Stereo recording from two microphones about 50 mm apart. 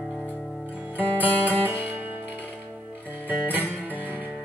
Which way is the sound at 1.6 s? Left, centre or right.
Right.